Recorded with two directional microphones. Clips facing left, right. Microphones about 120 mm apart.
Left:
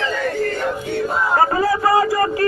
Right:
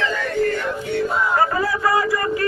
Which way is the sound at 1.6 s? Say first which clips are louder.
Left 4 dB; 40° left (ahead or behind).